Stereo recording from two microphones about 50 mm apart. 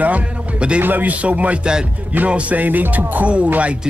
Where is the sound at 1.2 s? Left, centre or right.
Right.